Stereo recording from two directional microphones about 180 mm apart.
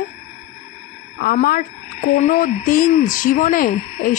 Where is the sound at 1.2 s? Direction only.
50° left (ahead or behind).